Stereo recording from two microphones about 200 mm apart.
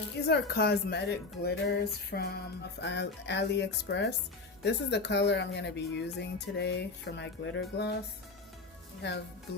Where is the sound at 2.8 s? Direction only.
60° left (ahead or behind).